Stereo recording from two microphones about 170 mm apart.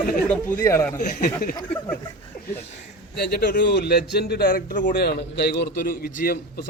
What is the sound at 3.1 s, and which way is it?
A man's voice, 75° left (ahead or behind).